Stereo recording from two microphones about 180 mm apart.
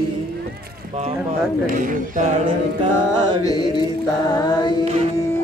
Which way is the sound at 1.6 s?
50° right (ahead or behind).